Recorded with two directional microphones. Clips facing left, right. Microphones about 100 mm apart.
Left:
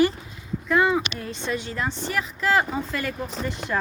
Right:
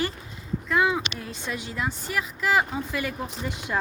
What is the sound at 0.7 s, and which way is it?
Speech, centre (ahead or behind).